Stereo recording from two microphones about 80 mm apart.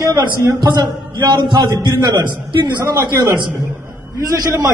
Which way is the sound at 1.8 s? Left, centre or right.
Right.